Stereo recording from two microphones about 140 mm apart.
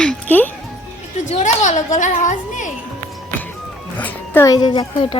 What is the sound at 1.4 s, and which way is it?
A woman's voice, 65° left (ahead or behind).